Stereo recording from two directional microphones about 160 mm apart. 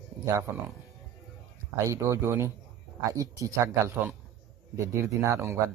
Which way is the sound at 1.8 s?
20° right (ahead or behind).